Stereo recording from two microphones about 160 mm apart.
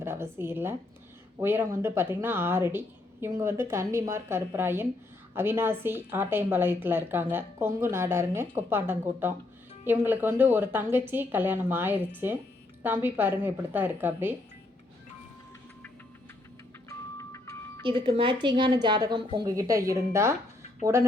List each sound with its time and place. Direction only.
0.0 s a woman's voice: 15° right (ahead or behind)
17.2 s music: 20° left (ahead or behind)
17.8 s a woman's voice: 35° right (ahead or behind); by 20.3 s 15° right (ahead or behind)